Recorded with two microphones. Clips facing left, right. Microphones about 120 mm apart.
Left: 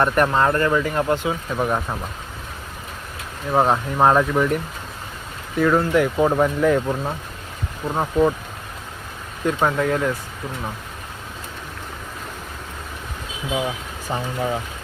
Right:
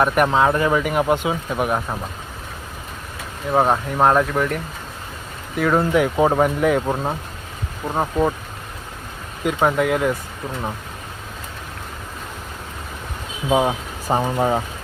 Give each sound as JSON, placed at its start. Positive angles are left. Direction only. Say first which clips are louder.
{"t": 0.0, "sound": "speech", "louder": "right 1 dB", "side_deg": -10}
{"t": 3.5, "sound": "speech", "louder": "right 1 dB", "side_deg": 0}
{"t": 5.9, "sound": "speech", "louder": "right 1 dB", "side_deg": -20}
{"t": 6.8, "sound": "speech", "louder": "right 2 dB", "side_deg": -25}
{"t": 7.9, "sound": "speech", "louder": "left 1 dB", "side_deg": -10}
{"t": 9.4, "sound": "speech", "louder": "right 2 dB", "side_deg": -10}
{"t": 13.5, "sound": "speech", "louder": "right 7 dB", "side_deg": -45}